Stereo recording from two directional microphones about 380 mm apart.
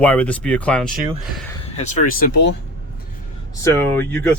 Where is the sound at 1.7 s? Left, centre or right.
Centre.